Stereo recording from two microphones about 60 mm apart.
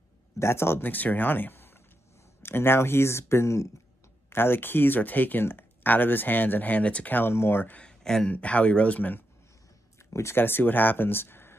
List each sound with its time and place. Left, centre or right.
0.4 s speech: left
4.3 s speech: left
7.2 s speech: left
7.8 s speech: centre
8.3 s speech: left
10.3 s speech: left